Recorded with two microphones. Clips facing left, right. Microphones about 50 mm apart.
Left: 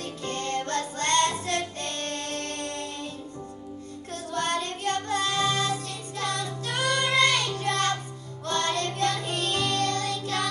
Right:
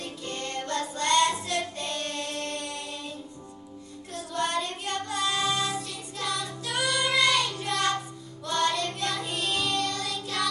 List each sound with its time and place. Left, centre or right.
0.0 s music: left
4.1 s music: left
7.4 s child singing: left
8.5 s music: left
10.2 s child singing: left